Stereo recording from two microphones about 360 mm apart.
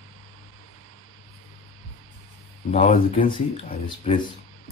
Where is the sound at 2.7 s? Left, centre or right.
Left.